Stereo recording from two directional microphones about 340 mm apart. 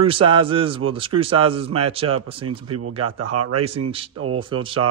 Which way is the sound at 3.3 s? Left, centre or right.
Right.